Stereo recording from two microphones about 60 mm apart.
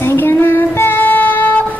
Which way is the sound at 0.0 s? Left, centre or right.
Left.